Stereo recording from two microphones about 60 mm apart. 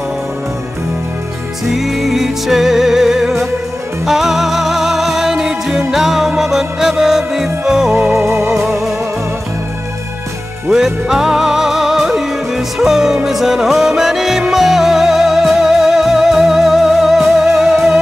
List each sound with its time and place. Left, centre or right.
1.7 s music: centre
8.2 s music: right
8.5 s music: centre
10.7 s music: centre